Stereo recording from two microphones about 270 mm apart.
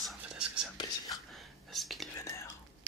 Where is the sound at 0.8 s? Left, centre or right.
Centre.